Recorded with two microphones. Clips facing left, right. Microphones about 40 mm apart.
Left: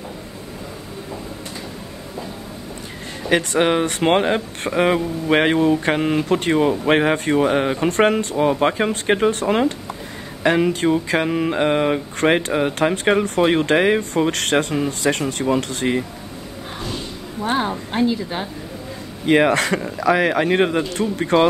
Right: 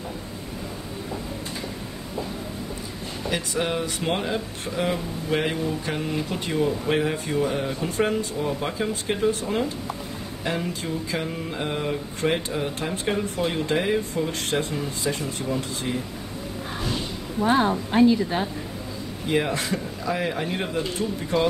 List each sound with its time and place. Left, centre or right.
3.3 s speech: left
17.4 s a woman's voice: right
18.0 s speech: left
19.2 s a man's voice: left